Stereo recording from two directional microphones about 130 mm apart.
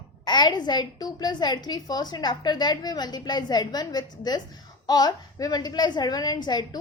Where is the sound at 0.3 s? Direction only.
35° left (ahead or behind).